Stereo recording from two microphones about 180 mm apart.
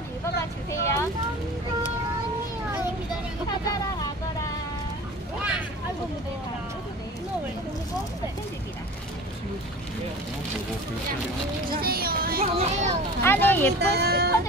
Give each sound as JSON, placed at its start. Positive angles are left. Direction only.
{"t": 0.4, "sound": "speech", "side_deg": 15}
{"t": 3.4, "sound": "speech", "side_deg": 20}
{"t": 11.8, "sound": "speech", "side_deg": -55}
{"t": 12.5, "sound": "a child's voice", "side_deg": -40}
{"t": 13.2, "sound": "speech", "side_deg": 10}
{"t": 13.7, "sound": "speech", "side_deg": -65}